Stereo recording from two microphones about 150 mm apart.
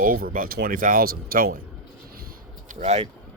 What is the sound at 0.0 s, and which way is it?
Speech, 75° right (ahead or behind).